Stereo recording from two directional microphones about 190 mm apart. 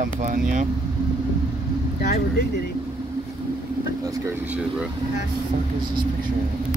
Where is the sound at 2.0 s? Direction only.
55° left (ahead or behind).